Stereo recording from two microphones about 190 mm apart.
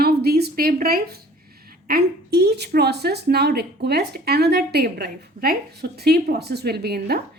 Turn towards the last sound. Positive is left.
turn(degrees=-55)  # may be behind; listen again after turning